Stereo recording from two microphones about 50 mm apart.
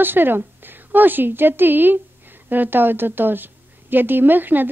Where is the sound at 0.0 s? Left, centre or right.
Right.